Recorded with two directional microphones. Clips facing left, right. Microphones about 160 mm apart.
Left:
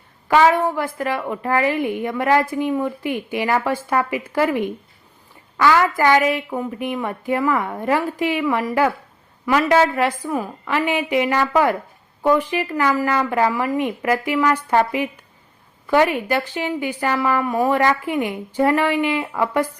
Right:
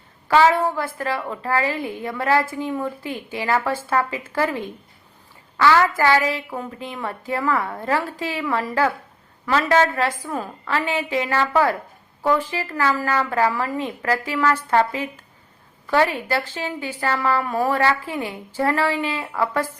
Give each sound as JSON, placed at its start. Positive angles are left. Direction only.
{"t": 0.3, "sound": "a woman's voice", "side_deg": 15}